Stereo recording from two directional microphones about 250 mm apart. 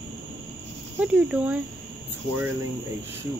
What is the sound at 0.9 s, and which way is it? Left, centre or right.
Speech, centre.